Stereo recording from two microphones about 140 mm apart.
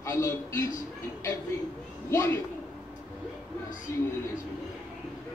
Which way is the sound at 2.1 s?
20° left (ahead or behind).